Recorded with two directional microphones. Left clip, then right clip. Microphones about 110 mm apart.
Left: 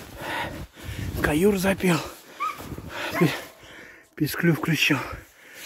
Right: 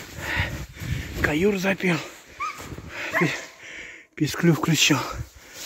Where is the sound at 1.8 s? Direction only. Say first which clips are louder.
Left 1 dB; 35° left (ahead or behind).